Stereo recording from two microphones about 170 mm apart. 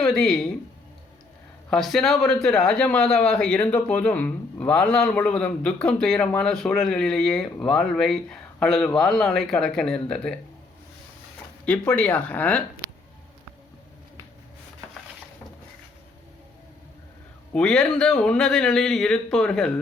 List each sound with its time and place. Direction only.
0.0 s speech: 5° left (ahead or behind)
1.7 s a man's voice: centre (ahead or behind)
11.6 s speech: 10° left (ahead or behind)
17.5 s a man's voice: 5° left (ahead or behind)